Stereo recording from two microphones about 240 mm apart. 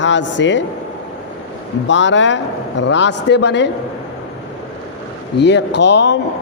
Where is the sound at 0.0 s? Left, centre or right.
Left.